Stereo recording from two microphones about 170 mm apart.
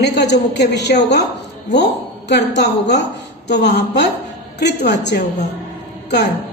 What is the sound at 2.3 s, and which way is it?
A woman's voice, 85° left.